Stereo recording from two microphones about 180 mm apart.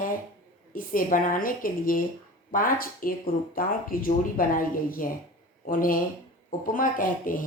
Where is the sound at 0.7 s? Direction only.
50° left (ahead or behind).